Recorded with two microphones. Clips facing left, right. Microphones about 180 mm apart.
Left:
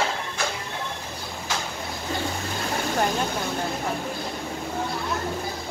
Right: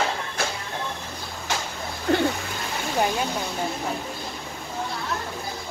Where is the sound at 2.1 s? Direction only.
65° right (ahead or behind).